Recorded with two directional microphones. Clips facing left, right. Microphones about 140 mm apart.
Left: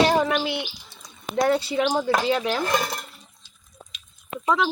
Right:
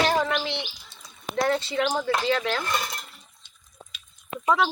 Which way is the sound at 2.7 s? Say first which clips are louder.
Left 5 dB; 50° left (ahead or behind).